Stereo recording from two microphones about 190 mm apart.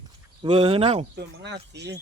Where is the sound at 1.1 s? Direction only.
60° right (ahead or behind).